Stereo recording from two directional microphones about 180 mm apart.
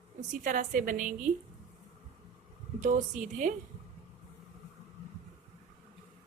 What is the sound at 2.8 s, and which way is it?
Speech, 45° right (ahead or behind).